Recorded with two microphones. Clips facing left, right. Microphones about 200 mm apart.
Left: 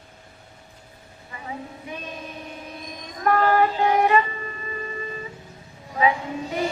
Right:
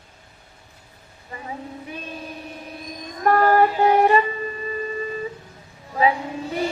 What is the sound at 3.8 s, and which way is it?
Vehicle, 40° right (ahead or behind).